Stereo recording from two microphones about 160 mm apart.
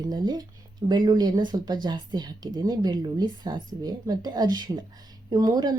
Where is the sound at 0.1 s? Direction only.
25° right (ahead or behind).